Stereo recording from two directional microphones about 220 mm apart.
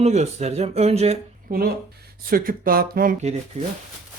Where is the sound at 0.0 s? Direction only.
30° right (ahead or behind).